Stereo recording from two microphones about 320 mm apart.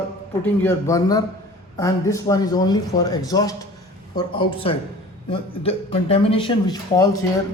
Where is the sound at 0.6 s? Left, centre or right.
Centre.